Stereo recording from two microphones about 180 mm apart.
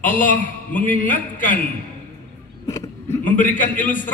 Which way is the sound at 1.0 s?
50° left (ahead or behind).